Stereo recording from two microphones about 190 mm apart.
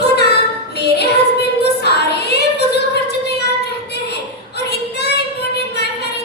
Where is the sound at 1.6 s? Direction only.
60° left (ahead or behind).